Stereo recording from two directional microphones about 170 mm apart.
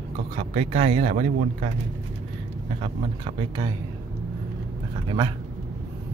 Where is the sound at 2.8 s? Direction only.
35° right (ahead or behind).